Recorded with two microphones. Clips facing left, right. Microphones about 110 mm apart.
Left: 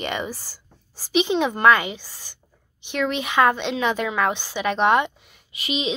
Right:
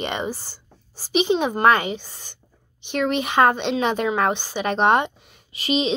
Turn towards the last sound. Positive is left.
turn(degrees=-35)  # may be behind; listen again after turning